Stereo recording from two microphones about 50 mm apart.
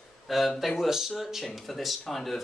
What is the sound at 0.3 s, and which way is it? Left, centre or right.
A woman's voice, centre.